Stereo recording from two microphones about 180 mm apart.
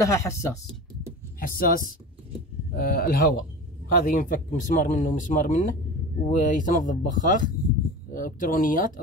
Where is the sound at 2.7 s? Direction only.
55° left (ahead or behind).